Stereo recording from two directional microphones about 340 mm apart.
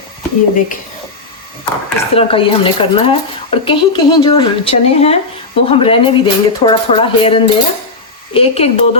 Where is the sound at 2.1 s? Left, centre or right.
Centre.